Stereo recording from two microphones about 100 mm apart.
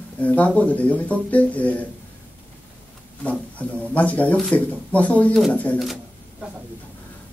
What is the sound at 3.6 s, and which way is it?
Speech, 15° left (ahead or behind).